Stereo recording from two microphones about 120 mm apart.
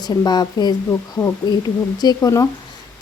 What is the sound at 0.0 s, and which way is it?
Speech, 35° left (ahead or behind).